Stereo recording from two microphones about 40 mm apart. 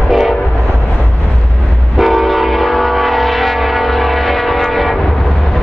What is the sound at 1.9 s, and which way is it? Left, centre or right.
Train, centre.